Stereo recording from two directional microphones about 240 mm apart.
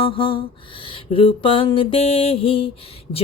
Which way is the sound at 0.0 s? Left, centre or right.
Left.